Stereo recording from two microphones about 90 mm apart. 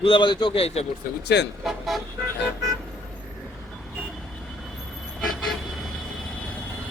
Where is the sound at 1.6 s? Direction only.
Centre (ahead or behind).